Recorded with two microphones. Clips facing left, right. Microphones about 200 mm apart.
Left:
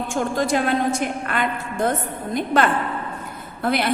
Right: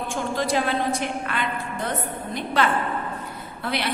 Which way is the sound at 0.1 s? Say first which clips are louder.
Left 3 dB; 45° left (ahead or behind).